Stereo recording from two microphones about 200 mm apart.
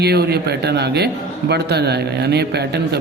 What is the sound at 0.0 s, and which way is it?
A man's voice, 55° right (ahead or behind).